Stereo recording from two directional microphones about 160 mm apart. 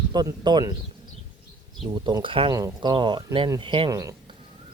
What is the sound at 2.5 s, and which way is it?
Speech, 20° right (ahead or behind).